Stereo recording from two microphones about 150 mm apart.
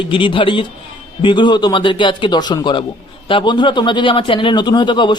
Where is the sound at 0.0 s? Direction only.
35° left (ahead or behind).